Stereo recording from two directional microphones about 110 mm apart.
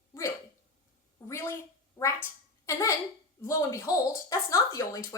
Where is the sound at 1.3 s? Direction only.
25° left (ahead or behind).